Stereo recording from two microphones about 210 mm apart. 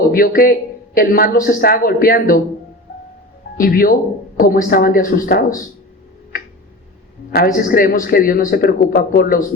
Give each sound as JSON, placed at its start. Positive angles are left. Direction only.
{"t": 0.1, "sound": "speech", "side_deg": 45}
{"t": 3.6, "sound": "speech", "side_deg": 45}
{"t": 7.3, "sound": "speech", "side_deg": 45}